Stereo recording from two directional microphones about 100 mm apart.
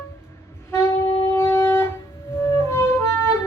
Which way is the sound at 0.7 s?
25° left (ahead or behind).